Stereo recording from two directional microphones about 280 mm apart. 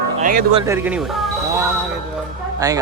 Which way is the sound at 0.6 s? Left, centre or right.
Centre.